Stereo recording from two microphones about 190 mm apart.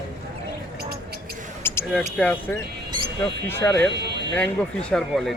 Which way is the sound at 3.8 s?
65° right (ahead or behind).